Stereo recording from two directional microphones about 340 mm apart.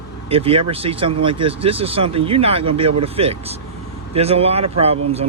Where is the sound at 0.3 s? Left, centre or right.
Centre.